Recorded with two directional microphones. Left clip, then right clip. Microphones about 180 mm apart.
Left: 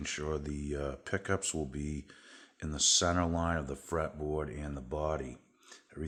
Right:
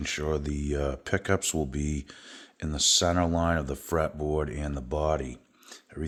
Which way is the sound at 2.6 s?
20° right (ahead or behind).